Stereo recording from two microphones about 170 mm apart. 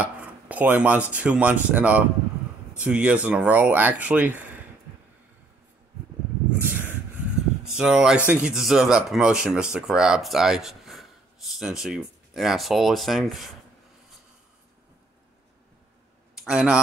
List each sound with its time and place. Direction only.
0.0 s speech: 10° right (ahead or behind)
6.6 s rub: 10° right (ahead or behind)
7.6 s speech: 5° right (ahead or behind)
16.3 s speech: 5° right (ahead or behind)